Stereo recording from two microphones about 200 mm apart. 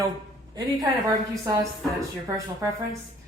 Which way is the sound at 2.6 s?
15° right (ahead or behind).